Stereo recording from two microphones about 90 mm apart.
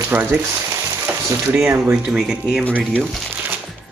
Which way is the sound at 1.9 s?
10° right (ahead or behind).